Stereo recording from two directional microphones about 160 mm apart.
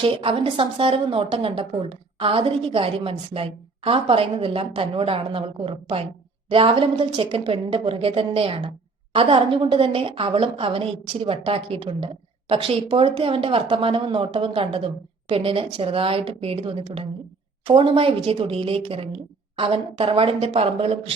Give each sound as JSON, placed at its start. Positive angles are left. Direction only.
{"t": 0.0, "sound": "a woman's voice", "side_deg": -35}